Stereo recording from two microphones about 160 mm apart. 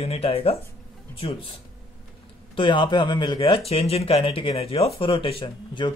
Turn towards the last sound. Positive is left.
turn(degrees=30)  # may be behind; listen again after turning